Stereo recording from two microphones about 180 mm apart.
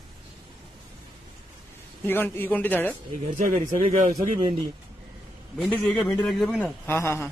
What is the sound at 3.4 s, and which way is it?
Speech, 45° right (ahead or behind).